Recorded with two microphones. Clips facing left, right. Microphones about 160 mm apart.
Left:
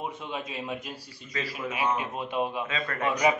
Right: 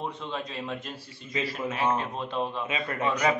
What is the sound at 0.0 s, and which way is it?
Speech, 10° left (ahead or behind).